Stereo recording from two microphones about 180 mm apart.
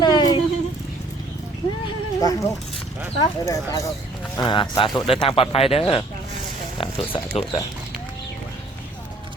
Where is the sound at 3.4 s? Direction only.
20° left (ahead or behind).